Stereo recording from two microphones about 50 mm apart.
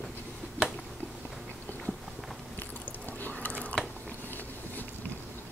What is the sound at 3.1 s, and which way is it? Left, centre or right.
Water, left.